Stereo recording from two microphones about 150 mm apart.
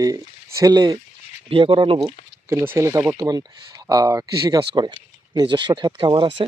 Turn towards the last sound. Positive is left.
turn(degrees=-30)  # may be behind; listen again after turning